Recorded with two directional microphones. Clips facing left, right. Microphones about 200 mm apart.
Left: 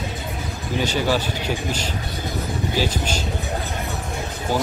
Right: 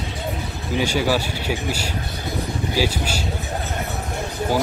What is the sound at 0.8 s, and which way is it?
Speech, 10° right (ahead or behind).